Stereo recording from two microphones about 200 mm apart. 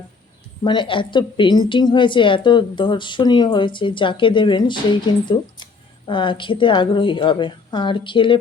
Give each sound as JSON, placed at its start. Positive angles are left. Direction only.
{"t": 0.6, "sound": "a woman's voice", "side_deg": 25}